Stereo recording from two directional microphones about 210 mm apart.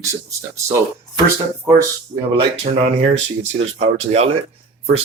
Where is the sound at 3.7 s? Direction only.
30° right (ahead or behind).